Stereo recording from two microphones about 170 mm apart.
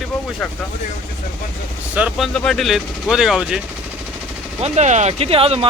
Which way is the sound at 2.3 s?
5° left (ahead or behind).